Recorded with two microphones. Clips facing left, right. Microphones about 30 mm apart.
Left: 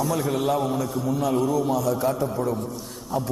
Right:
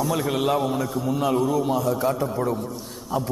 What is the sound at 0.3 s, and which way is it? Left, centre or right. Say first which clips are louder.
A man's voice: right 1 dB; right.